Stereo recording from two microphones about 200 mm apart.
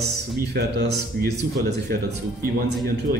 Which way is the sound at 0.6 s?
55° right (ahead or behind).